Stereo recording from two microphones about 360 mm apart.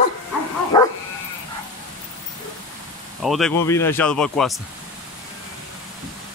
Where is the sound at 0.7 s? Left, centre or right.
Centre.